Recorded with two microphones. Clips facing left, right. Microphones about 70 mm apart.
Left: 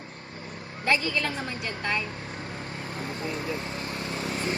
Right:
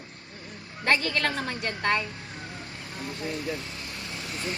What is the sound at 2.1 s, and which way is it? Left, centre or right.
Vehicle, left.